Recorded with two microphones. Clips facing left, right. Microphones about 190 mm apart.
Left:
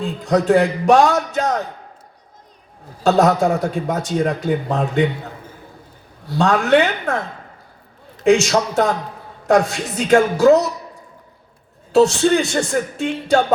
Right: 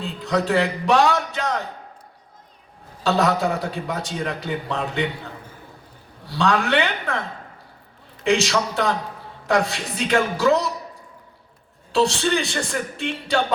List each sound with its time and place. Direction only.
0.0 s a man's voice: 45° left (ahead or behind)
3.0 s a man's voice: 45° left (ahead or behind)
11.9 s a man's voice: 45° left (ahead or behind)